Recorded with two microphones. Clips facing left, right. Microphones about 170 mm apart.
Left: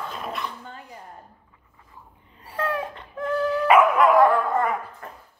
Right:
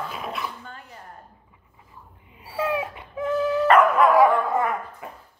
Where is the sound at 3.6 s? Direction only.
10° left (ahead or behind).